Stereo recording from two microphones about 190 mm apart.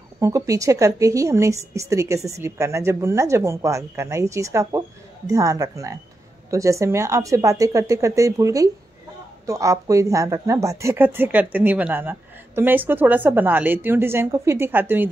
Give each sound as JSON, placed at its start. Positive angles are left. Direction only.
{"t": 0.2, "sound": "a woman's voice", "side_deg": -15}